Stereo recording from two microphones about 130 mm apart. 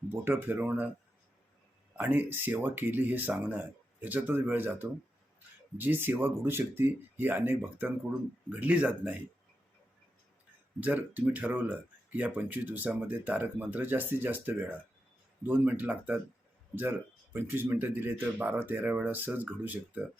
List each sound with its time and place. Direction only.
0.1 s speech: 15° right (ahead or behind)
2.0 s speech: 15° right (ahead or behind)
10.8 s speech: 15° right (ahead or behind)